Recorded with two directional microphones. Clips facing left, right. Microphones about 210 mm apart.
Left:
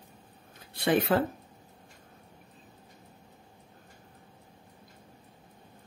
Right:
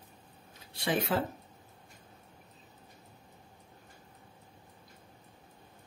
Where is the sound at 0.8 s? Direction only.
55° left (ahead or behind).